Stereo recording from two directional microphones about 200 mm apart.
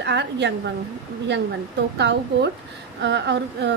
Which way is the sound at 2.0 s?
60° right (ahead or behind).